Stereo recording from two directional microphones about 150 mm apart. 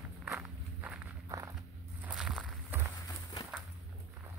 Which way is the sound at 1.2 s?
20° right (ahead or behind).